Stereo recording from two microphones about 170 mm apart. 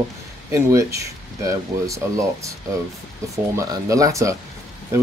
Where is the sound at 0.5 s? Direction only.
20° right (ahead or behind).